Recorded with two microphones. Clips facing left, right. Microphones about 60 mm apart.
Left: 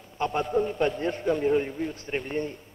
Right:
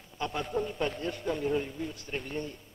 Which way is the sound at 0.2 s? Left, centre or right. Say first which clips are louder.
Left 7 dB; left.